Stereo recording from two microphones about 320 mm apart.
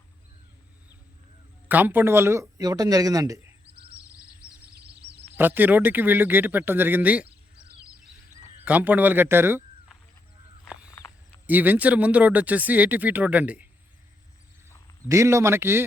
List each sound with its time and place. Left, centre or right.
1.6 s speech: centre
5.0 s a sound: right
5.4 s speech: centre
8.6 s a man's voice: centre
10.7 s a sound: centre
11.4 s speech: centre
15.0 s speech: centre